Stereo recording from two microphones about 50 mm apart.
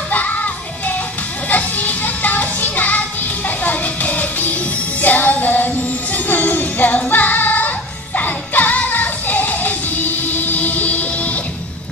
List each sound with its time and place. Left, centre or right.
0.1 s music: left